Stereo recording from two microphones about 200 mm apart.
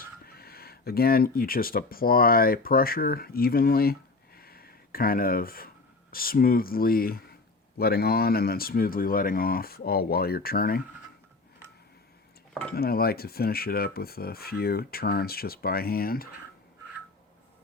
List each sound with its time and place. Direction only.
0.0 s speech: 50° left (ahead or behind)
4.4 s a sound: 50° left (ahead or behind)
7.8 s speech: 50° left (ahead or behind)
12.7 s speech: 50° left (ahead or behind)